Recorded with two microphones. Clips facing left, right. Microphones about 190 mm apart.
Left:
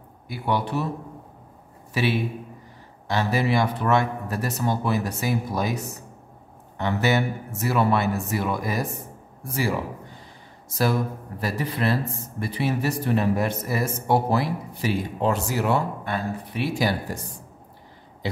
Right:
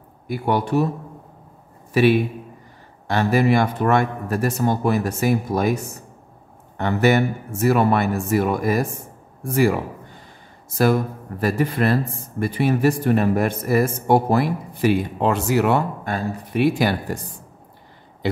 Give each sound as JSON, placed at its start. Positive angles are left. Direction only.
{"t": 0.3, "sound": "speech", "side_deg": -45}
{"t": 2.0, "sound": "speech", "side_deg": -55}
{"t": 11.4, "sound": "speech", "side_deg": -55}
{"t": 16.0, "sound": "speech", "side_deg": -40}
{"t": 16.6, "sound": "speech", "side_deg": -60}